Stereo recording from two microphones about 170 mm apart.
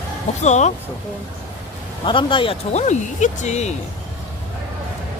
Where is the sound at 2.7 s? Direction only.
45° left (ahead or behind).